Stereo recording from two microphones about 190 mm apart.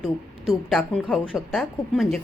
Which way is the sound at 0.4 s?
Centre (ahead or behind).